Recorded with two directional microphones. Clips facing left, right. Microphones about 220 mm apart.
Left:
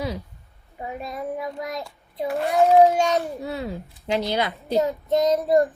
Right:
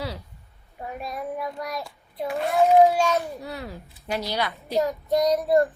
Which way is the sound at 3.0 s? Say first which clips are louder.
Left 2 dB; 20° left (ahead or behind).